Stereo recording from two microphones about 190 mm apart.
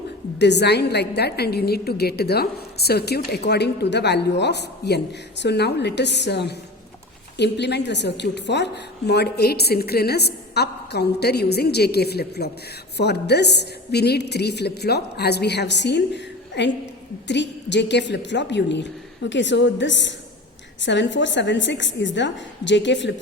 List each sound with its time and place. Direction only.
0.3 s a woman's voice: 65° left (ahead or behind)